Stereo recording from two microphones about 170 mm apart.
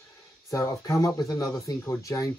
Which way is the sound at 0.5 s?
20° left (ahead or behind).